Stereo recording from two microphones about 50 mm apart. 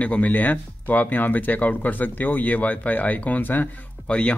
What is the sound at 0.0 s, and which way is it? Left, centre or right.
Speech, left.